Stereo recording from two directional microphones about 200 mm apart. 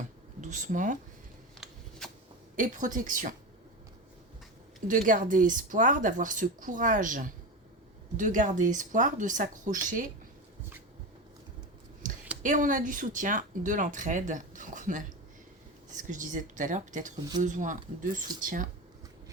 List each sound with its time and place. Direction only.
0.4 s speech: 40° right (ahead or behind)
2.6 s speech: 40° right (ahead or behind)
4.9 s speech: 40° right (ahead or behind)
12.4 s speech: 40° right (ahead or behind)